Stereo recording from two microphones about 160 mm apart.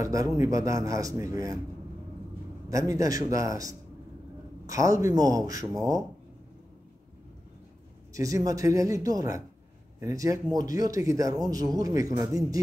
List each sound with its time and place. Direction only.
0.0 s a man's voice: 20° right (ahead or behind)
2.7 s a man's voice: 20° right (ahead or behind)
8.1 s a man's voice: 20° right (ahead or behind)